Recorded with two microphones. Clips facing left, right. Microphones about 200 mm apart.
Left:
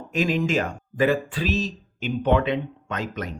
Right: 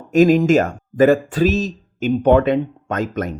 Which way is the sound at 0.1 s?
45° right (ahead or behind).